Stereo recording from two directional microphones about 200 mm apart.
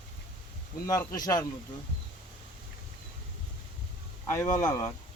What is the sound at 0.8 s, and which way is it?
Speech, 15° left (ahead or behind).